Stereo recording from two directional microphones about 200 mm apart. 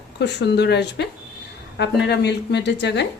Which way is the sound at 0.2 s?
60° left (ahead or behind).